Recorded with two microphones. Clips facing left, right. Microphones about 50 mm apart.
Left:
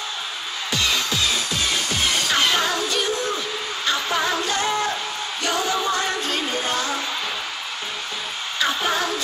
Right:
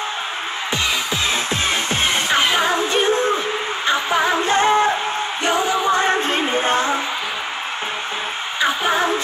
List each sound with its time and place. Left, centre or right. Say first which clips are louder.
0.8 s music: even; right
3.8 s music: right 4 dB; right
8.5 s music: right 4 dB; centre